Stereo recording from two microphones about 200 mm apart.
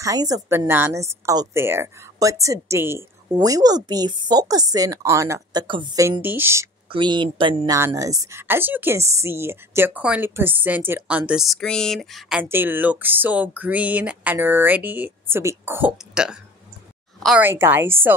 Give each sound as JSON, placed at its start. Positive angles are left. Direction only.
{"t": 0.0, "sound": "a woman's voice", "side_deg": -20}
{"t": 6.9, "sound": "a woman's voice", "side_deg": -25}